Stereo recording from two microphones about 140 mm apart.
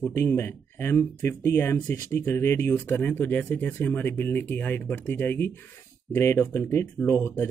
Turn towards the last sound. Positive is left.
turn(degrees=20)  # may be behind; listen again after turning